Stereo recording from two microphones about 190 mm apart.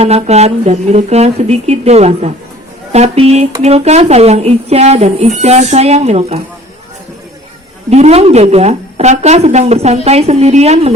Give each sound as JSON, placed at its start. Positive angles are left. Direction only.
{"t": 0.0, "sound": "a woman's voice", "side_deg": -35}
{"t": 7.9, "sound": "a woman's voice", "side_deg": -35}